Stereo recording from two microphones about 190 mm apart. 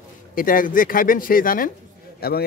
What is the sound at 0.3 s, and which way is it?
Speech, 45° left (ahead or behind).